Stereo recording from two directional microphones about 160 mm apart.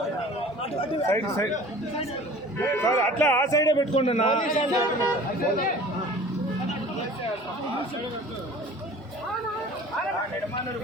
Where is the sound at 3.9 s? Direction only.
35° left (ahead or behind).